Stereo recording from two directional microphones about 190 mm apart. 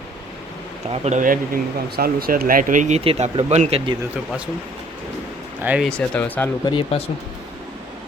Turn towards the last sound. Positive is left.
turn(degrees=30)  # may be behind; listen again after turning